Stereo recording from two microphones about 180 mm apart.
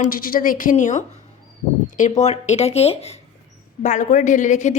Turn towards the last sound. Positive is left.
turn(degrees=40)  # may be behind; listen again after turning